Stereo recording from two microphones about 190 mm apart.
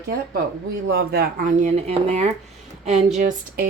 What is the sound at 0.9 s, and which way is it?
Speech, 55° right (ahead or behind).